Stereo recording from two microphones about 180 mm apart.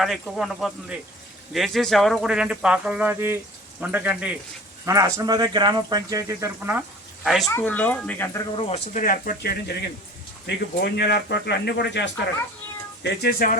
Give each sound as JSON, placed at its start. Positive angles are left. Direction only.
{"t": 0.0, "sound": "speech", "side_deg": 0}
{"t": 4.9, "sound": "speech", "side_deg": -20}
{"t": 7.4, "sound": "speech", "side_deg": 10}
{"t": 8.5, "sound": "speech", "side_deg": 35}